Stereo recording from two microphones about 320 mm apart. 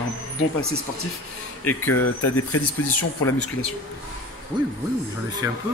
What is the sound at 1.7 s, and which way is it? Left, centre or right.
Speech, left.